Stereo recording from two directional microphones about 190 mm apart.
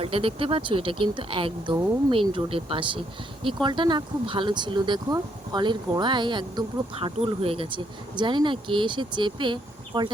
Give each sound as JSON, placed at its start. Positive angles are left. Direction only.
{"t": 0.0, "sound": "speech", "side_deg": -30}